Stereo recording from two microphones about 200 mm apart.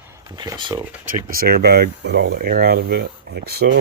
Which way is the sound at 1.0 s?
45° right (ahead or behind).